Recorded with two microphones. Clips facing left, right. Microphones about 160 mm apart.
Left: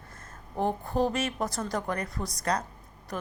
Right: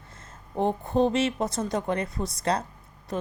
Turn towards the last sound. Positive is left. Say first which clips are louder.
# right 5 dB
turn(degrees=-25)  # may be behind; listen again after turning